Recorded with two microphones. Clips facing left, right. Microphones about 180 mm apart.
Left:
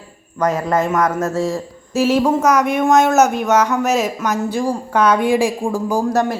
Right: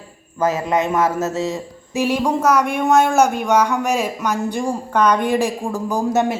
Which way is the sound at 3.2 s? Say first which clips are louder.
Left 2 dB; 5° left (ahead or behind).